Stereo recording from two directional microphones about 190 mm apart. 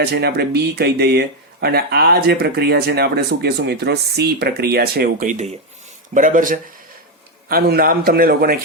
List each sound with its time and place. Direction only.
0.0 s a man's voice: 60° right (ahead or behind)